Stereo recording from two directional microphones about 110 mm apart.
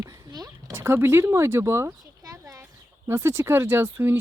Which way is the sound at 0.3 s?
35° right (ahead or behind).